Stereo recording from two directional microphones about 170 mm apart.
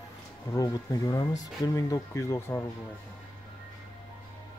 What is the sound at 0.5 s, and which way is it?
Speech, 20° left (ahead or behind).